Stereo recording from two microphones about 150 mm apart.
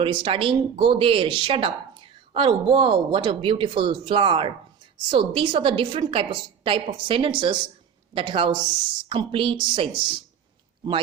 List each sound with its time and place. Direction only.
0.0 s a woman's voice: 35° right (ahead or behind)